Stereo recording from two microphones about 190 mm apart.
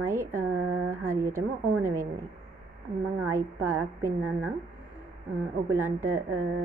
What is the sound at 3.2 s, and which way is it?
A woman's voice, 15° right (ahead or behind).